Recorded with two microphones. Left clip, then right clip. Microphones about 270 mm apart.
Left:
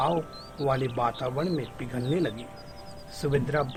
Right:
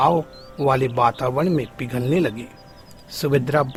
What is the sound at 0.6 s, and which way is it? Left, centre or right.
Speech, right.